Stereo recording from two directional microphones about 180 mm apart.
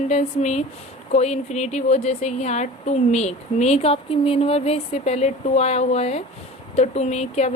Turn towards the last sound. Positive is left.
turn(degrees=35)  # may be behind; listen again after turning